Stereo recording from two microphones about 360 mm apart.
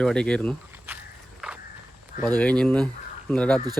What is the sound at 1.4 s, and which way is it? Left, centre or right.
Walk, centre.